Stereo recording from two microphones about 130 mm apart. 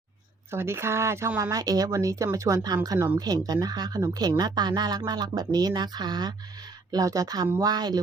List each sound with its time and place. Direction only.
0.5 s speech: 20° right (ahead or behind)